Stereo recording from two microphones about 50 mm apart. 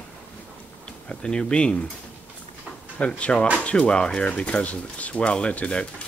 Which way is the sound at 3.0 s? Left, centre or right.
Left.